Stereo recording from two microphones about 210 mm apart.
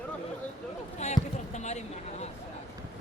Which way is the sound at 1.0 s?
35° left (ahead or behind).